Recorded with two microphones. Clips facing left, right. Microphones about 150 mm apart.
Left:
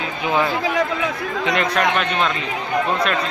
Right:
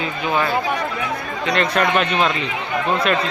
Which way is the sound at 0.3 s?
20° left (ahead or behind).